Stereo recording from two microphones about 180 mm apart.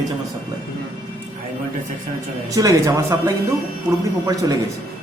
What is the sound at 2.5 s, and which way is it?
Speech, 15° right (ahead or behind).